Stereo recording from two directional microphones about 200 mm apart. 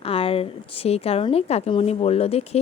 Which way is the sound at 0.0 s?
30° left (ahead or behind).